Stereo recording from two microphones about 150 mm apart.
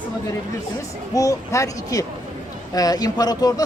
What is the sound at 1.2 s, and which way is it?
Speech, 20° left (ahead or behind).